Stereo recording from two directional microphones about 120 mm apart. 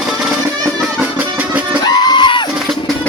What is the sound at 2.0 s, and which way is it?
Music, 40° left (ahead or behind).